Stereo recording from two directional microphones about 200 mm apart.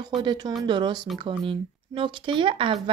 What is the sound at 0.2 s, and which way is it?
Speech, 25° right (ahead or behind).